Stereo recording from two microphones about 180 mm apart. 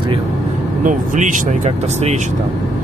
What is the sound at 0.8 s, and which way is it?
Speech, 45° right (ahead or behind).